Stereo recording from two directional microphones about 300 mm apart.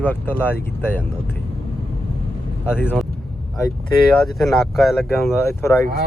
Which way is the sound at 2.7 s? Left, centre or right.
Centre.